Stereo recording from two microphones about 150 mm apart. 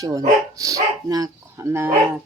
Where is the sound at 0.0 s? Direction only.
25° right (ahead or behind).